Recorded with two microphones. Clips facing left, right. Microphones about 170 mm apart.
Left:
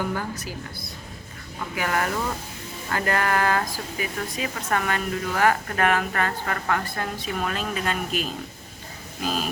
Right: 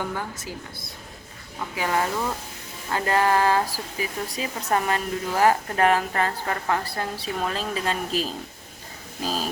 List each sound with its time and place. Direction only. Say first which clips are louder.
0.0 s speech: left 2 dB; 20° right (ahead or behind)